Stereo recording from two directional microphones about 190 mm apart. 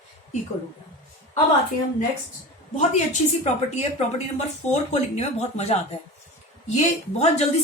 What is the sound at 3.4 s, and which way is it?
Speech, 35° left (ahead or behind).